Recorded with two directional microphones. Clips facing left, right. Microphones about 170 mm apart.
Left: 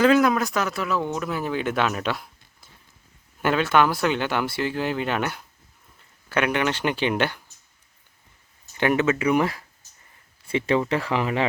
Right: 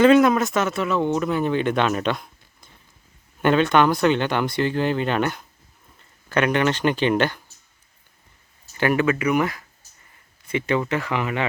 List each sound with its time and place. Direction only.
0.0 s speech: centre (ahead or behind)
8.8 s speech: 20° left (ahead or behind)